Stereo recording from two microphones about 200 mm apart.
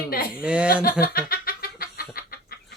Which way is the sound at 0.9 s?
45° left (ahead or behind).